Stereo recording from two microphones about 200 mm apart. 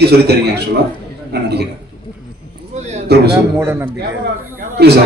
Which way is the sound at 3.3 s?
10° right (ahead or behind).